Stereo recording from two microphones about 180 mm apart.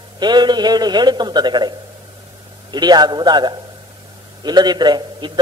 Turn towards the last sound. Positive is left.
turn(degrees=-25)  # may be behind; listen again after turning